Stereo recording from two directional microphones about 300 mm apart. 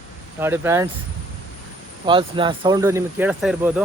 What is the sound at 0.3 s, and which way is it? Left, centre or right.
Speech, centre.